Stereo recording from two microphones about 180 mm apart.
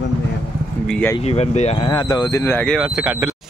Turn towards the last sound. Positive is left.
turn(degrees=-5)  # may be behind; listen again after turning